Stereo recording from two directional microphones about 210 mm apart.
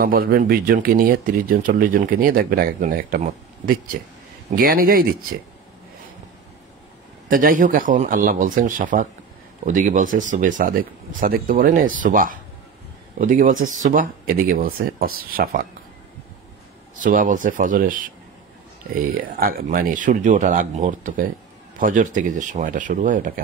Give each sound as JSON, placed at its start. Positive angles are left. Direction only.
{"t": 0.0, "sound": "speech", "side_deg": -45}
{"t": 7.2, "sound": "speech", "side_deg": -40}
{"t": 16.9, "sound": "speech", "side_deg": -40}
{"t": 19.4, "sound": "speech", "side_deg": -40}